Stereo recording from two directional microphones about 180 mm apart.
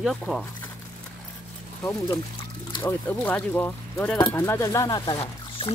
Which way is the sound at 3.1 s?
10° left (ahead or behind).